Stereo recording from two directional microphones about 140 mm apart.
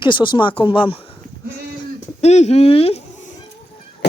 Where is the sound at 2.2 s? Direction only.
50° left (ahead or behind).